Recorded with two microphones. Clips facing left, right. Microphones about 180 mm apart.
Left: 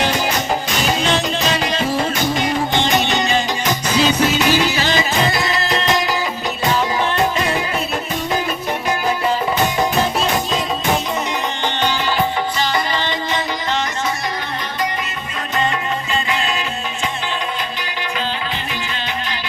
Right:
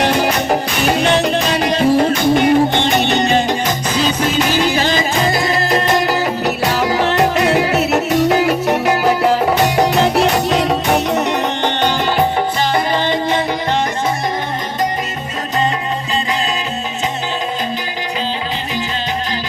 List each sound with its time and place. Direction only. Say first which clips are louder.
0.0 s music: right 4 dB; 60° right (ahead or behind)